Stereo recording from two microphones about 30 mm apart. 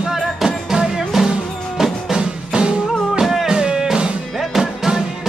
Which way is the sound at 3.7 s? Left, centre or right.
Centre.